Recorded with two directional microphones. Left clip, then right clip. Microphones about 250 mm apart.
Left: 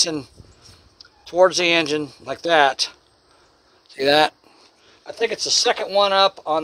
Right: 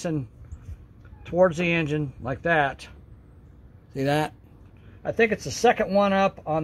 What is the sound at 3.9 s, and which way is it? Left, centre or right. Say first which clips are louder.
Speech: left 9 dB; left.